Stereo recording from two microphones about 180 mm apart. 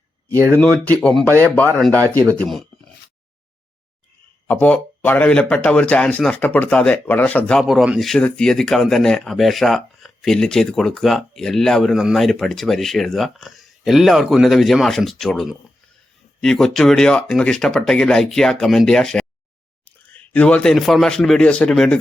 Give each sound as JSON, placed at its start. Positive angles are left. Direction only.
{"t": 0.3, "sound": "speech", "side_deg": -15}
{"t": 2.3, "sound": "a man's voice", "side_deg": 5}
{"t": 4.4, "sound": "a man's voice", "side_deg": 10}